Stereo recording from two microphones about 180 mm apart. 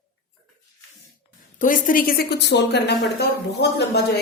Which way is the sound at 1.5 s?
50° left (ahead or behind).